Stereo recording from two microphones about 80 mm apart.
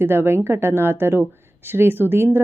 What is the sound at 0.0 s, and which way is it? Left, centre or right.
Speech, right.